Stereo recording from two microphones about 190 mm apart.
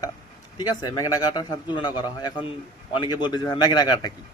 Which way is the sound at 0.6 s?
20° left (ahead or behind).